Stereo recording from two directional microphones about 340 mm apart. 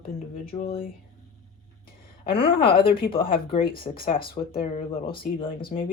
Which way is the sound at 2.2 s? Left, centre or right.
Centre.